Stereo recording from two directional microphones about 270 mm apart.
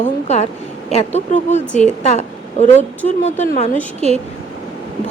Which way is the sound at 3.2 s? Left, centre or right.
Left.